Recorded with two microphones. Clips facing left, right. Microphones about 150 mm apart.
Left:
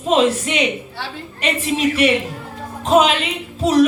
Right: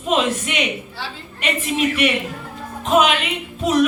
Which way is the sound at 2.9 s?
30° left (ahead or behind).